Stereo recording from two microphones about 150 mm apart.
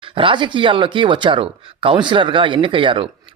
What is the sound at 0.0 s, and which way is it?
Speech, 35° right (ahead or behind).